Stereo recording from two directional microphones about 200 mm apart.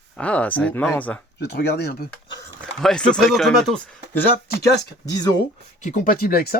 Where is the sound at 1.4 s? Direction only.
55° left (ahead or behind).